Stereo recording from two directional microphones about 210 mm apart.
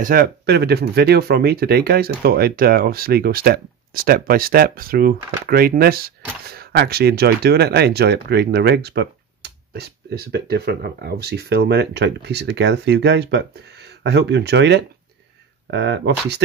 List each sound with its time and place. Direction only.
0.0 s speech: 45° right (ahead or behind)